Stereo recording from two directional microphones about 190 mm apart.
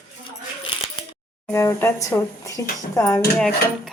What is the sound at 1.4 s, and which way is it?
Speech, 15° left (ahead or behind).